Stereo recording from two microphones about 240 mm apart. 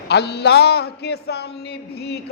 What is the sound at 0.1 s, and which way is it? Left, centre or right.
Speech, left.